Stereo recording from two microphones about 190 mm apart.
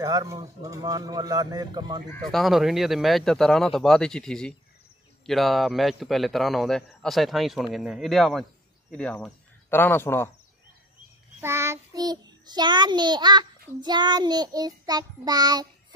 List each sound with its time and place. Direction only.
0.0 s speech: 20° right (ahead or behind)
2.2 s speech: centre (ahead or behind)
11.4 s a child's voice: 15° right (ahead or behind)